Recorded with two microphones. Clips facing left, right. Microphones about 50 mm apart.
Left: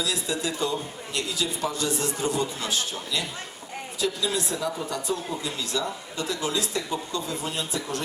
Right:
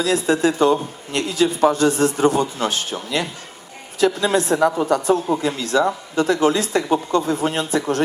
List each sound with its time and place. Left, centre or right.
0.0 s a woman's voice: right